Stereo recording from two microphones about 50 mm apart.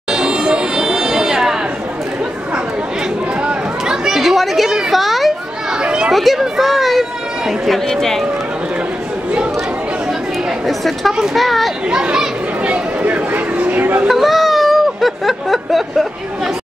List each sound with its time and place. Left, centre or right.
0.1 s a sound: centre
3.8 s chatter: centre
4.2 s chatter: centre
4.9 s children playing: centre
5.8 s children playing: centre
6.1 s speech: centre
10.7 s speech: centre
11.9 s speech: centre
13.0 s a sound: right
14.0 s speech: centre